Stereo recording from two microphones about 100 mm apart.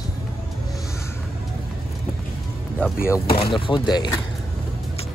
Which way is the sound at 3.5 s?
55° left (ahead or behind).